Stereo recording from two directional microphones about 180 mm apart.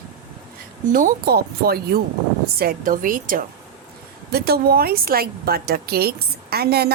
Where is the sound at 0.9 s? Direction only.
55° right (ahead or behind).